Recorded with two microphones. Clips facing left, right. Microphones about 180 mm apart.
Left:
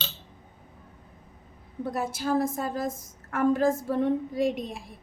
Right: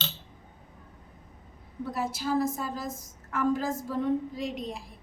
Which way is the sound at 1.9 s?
50° left (ahead or behind).